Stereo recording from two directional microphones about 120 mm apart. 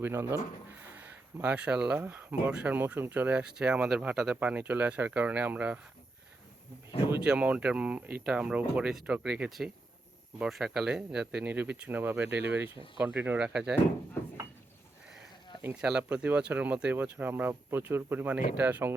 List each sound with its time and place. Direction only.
0.0 s speech: 20° right (ahead or behind)
7.3 s speech: 10° right (ahead or behind)
14.2 s a sound: 20° left (ahead or behind)
15.7 s speech: 10° right (ahead or behind)